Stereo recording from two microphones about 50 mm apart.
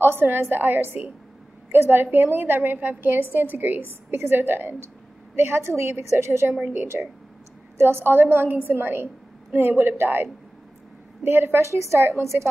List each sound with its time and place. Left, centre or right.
0.0 s a woman's voice: right
5.3 s a woman's voice: right
6.9 s speech: right
7.7 s a woman's voice: right
11.2 s a woman's voice: right